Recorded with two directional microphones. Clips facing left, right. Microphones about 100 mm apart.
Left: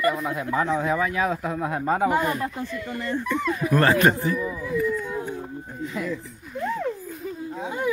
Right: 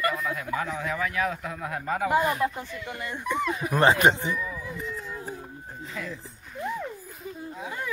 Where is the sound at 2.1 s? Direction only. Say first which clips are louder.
Even; 15° right (ahead or behind).